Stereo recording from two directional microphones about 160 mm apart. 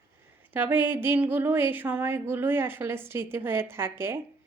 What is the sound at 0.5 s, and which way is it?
A woman's voice, 10° right (ahead or behind).